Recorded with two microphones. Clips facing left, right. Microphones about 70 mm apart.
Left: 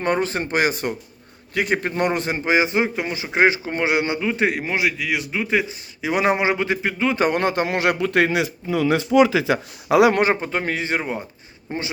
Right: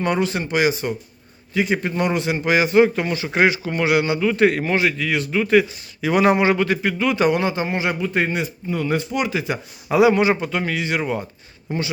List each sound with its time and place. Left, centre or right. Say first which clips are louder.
0.0 s speech: even; left
2.4 s speech: right 5 dB; left
7.3 s a man's voice: even; left
9.5 s speech: left 4 dB; left
10.2 s speech: right 1 dB; left